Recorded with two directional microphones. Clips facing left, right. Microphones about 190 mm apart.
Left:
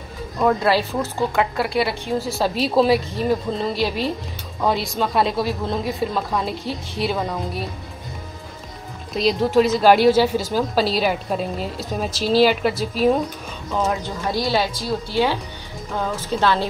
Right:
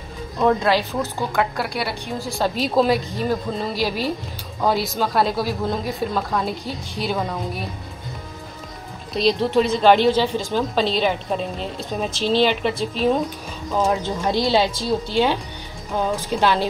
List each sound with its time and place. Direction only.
0.4 s a woman's voice: 5° left (ahead or behind)
9.1 s a woman's voice: centre (ahead or behind)
14.5 s a woman's voice: 25° right (ahead or behind)